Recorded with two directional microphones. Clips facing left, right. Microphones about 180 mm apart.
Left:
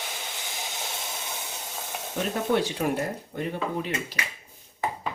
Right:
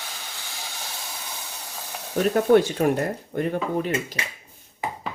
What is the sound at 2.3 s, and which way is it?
Speech, 50° right (ahead or behind).